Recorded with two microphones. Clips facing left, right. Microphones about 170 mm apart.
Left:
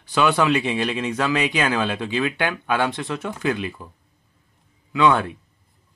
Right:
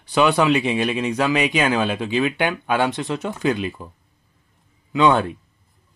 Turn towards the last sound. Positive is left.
turn(degrees=-25)  # may be behind; listen again after turning